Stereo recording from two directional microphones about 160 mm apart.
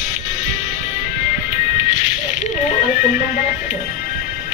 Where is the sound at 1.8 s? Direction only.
50° left (ahead or behind).